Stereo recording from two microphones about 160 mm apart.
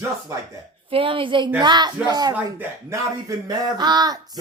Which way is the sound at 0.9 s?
35° right (ahead or behind).